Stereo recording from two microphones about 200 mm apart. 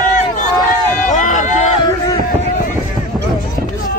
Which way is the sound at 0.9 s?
40° left (ahead or behind).